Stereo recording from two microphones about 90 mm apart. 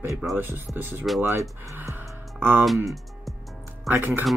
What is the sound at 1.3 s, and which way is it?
Speech, 35° right (ahead or behind).